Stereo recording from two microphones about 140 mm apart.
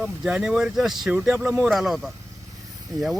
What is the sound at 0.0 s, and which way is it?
Speech, 5° right (ahead or behind).